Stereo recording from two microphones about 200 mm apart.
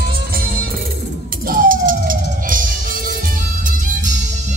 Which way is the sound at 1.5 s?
45° right (ahead or behind).